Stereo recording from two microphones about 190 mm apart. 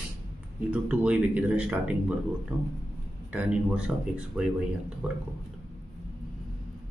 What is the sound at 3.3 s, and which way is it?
Speech, 5° right (ahead or behind).